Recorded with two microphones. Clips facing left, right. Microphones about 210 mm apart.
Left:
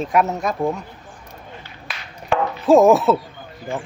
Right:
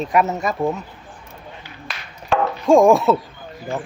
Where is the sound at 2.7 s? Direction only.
5° left (ahead or behind).